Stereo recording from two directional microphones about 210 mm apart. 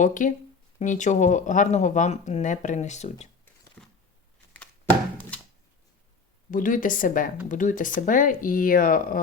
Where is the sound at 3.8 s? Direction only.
5° left (ahead or behind).